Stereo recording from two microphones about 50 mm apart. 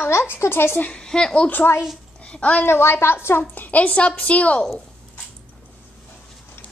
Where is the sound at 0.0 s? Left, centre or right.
Left.